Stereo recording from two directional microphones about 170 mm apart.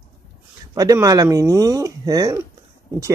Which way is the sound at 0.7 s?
20° right (ahead or behind).